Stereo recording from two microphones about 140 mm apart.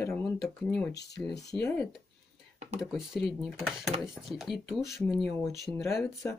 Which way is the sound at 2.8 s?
Centre (ahead or behind).